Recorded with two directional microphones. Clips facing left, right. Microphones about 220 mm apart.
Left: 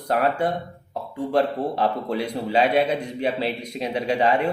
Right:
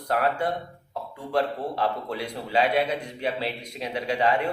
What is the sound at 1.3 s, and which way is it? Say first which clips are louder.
A man's voice: left 4 dB; 20° left (ahead or behind).